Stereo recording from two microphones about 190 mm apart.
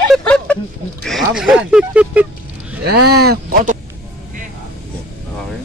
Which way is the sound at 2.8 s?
55° right (ahead or behind).